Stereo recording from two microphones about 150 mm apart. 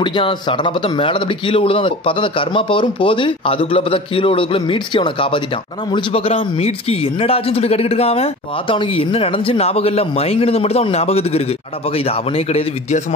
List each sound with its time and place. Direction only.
0.0 s a man's voice: 30° left (ahead or behind)